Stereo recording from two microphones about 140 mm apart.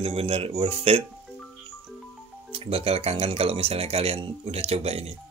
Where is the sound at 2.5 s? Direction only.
45° right (ahead or behind).